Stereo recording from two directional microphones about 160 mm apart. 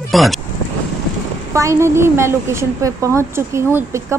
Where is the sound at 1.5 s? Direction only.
20° right (ahead or behind).